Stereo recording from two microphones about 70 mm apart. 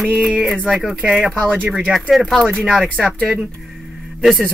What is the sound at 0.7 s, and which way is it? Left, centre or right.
Speech, centre.